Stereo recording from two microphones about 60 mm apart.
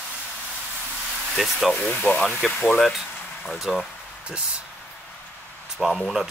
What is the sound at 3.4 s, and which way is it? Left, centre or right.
Speech, centre.